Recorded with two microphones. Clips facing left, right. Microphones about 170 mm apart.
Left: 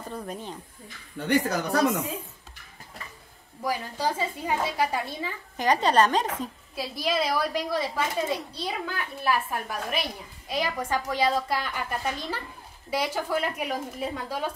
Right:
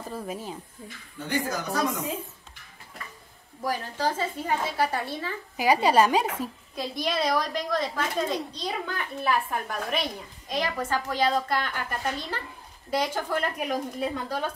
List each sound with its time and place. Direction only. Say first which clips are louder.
0.1 s a woman's voice: right 1 dB; 5° right (ahead or behind)
1.2 s speech: left 4 dB; 65° left (ahead or behind)
3.6 s a woman's voice: even; 10° left (ahead or behind)
5.6 s a woman's voice: right 1 dB; 10° right (ahead or behind)
6.7 s a woman's voice: left 2 dB; 5° left (ahead or behind)